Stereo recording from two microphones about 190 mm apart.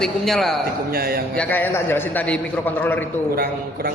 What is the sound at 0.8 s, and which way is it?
Speech, 50° right (ahead or behind).